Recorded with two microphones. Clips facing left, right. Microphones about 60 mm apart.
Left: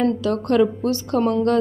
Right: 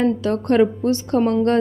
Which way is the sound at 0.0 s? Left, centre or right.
Right.